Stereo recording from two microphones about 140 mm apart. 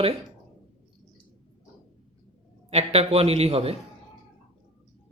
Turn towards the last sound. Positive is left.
turn(degrees=-45)  # may be behind; listen again after turning